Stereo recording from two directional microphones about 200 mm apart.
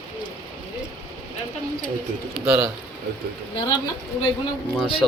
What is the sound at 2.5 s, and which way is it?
Speech, 5° right (ahead or behind).